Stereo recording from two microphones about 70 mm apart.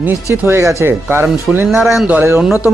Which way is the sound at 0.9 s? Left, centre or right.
Right.